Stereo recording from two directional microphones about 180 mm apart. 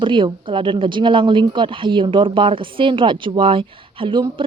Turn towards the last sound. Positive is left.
turn(degrees=-25)  # may be behind; listen again after turning